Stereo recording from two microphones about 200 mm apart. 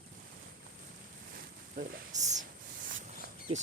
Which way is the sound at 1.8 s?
40° right (ahead or behind).